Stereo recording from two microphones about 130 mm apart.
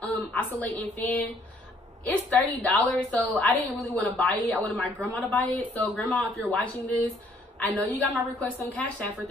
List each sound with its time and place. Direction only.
0.1 s a woman's voice: 10° left (ahead or behind)